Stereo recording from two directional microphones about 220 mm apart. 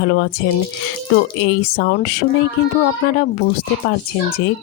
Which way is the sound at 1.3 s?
50° left (ahead or behind).